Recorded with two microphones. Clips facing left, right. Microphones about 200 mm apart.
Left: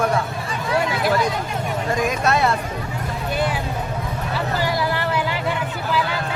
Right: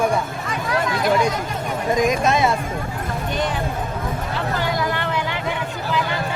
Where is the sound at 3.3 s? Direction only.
10° left (ahead or behind).